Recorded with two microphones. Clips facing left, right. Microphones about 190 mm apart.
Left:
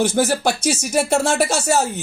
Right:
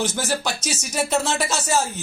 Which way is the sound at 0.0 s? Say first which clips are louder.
Left 7 dB; 60° left (ahead or behind).